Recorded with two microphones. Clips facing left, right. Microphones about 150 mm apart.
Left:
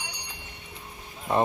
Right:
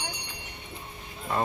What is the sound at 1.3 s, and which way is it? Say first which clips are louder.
Speech: left 5 dB; 20° left (ahead or behind).